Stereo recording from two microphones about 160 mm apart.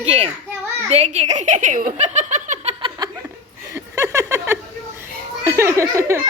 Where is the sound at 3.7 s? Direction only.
20° right (ahead or behind).